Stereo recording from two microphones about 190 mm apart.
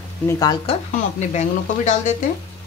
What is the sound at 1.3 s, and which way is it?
Speech, 40° left (ahead or behind).